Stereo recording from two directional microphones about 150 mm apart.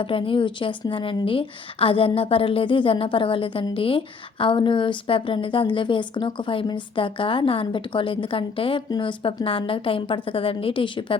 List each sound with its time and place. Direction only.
0.0 s a woman's voice: 35° left (ahead or behind)